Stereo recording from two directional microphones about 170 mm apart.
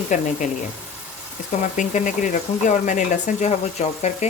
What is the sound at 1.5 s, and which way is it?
Speech, 45° left (ahead or behind).